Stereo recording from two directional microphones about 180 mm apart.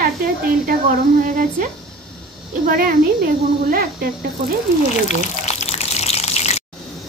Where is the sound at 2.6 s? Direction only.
50° right (ahead or behind).